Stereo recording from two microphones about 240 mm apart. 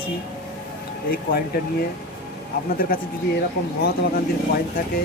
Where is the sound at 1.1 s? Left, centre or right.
Left.